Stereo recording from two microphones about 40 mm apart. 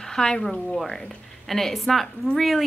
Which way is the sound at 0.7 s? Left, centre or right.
Centre.